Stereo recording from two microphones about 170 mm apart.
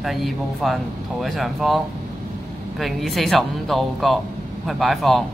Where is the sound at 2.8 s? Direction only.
Centre (ahead or behind).